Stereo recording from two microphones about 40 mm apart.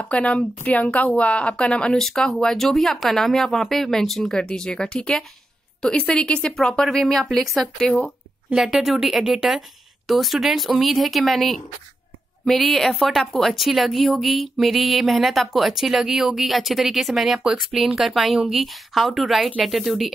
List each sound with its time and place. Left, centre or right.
0.0 s a woman's voice: left
2.0 s speech: centre
4.3 s speech: centre
6.5 s speech: centre
8.5 s speech: centre